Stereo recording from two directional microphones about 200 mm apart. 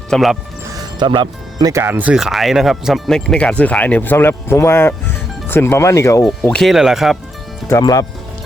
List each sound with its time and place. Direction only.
0.1 s speech: centre (ahead or behind)
0.7 s speech: 20° right (ahead or behind); by 6.2 s 15° left (ahead or behind)
6.4 s speech: 5° left (ahead or behind)
7.7 s speech: 20° left (ahead or behind)